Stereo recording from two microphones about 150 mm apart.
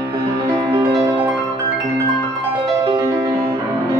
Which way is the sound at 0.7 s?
25° right (ahead or behind).